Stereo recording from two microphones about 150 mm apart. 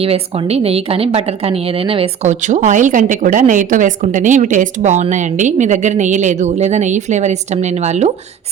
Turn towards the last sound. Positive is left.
turn(degrees=-50)  # may be behind; listen again after turning